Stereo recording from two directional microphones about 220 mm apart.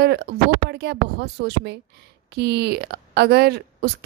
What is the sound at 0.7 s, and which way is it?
A woman's voice, 50° right (ahead or behind).